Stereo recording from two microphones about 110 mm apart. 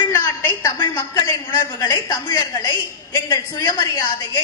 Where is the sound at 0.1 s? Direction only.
25° left (ahead or behind).